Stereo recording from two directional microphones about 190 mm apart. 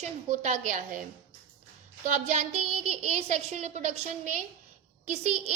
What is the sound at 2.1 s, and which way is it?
A woman's voice, 40° right (ahead or behind).